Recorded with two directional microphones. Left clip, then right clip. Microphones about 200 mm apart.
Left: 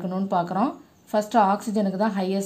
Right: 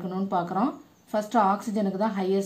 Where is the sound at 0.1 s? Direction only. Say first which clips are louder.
Left 2 dB; 40° left (ahead or behind).